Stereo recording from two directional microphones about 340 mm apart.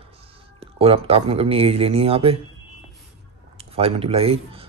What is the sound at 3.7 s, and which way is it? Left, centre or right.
Speech, centre.